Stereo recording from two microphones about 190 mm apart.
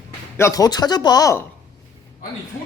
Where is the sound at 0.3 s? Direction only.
15° left (ahead or behind).